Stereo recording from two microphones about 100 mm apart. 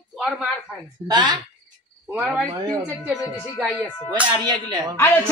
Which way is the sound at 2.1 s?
10° right (ahead or behind).